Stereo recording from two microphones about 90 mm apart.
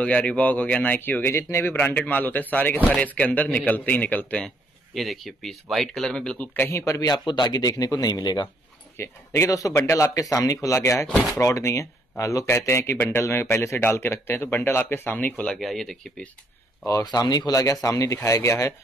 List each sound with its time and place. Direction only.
0.0 s speech: 15° left (ahead or behind)
4.9 s speech: centre (ahead or behind)
6.5 s a man's voice: 30° left (ahead or behind); by 8.5 s 50° left (ahead or behind)
8.9 s speech: 30° left (ahead or behind)
9.5 s speech: 40° left (ahead or behind); by 15.5 s 20° left (ahead or behind)
15.5 s speech: 5° left (ahead or behind)
16.8 s speech: 45° left (ahead or behind)